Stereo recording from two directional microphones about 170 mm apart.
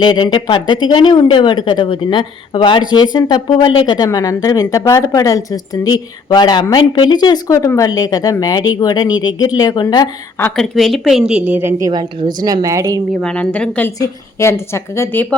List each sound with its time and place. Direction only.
0.0 s speech: 25° left (ahead or behind)
10.6 s speech: centre (ahead or behind)
11.9 s a woman's voice: 25° right (ahead or behind)
13.2 s a woman's voice: 5° left (ahead or behind)